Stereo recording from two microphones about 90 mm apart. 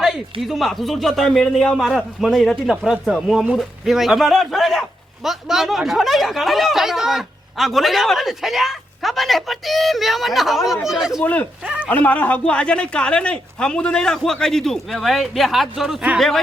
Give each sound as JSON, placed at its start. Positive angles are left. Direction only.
{"t": 0.4, "sound": "a man's voice", "side_deg": 0}
{"t": 11.2, "sound": "speech", "side_deg": 20}
{"t": 11.6, "sound": "a sound", "side_deg": -10}
{"t": 11.9, "sound": "speech", "side_deg": 20}